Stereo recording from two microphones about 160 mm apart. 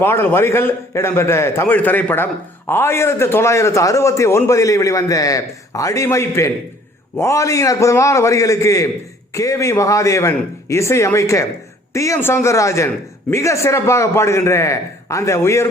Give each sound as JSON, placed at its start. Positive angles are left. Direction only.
{"t": 0.0, "sound": "a man's voice", "side_deg": 15}